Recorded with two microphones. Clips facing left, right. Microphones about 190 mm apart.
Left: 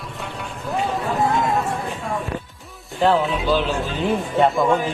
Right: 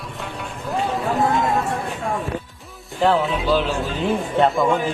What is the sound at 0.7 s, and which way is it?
Run, centre (ahead or behind).